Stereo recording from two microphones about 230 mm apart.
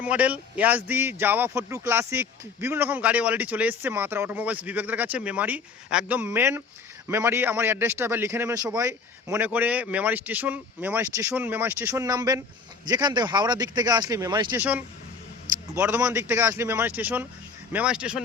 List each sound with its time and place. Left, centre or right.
0.0 s speech: centre
14.6 s speech: centre